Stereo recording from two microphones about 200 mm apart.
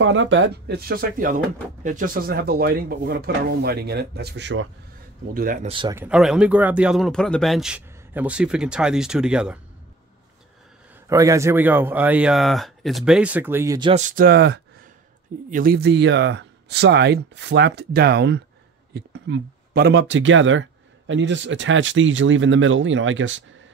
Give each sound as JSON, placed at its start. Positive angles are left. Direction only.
{"t": 0.0, "sound": "speech", "side_deg": -70}
{"t": 5.3, "sound": "speech", "side_deg": -45}
{"t": 5.7, "sound": "speech", "side_deg": -25}
{"t": 5.9, "sound": "speech", "side_deg": -5}
{"t": 11.1, "sound": "speech", "side_deg": -15}
{"t": 13.9, "sound": "speech", "side_deg": -40}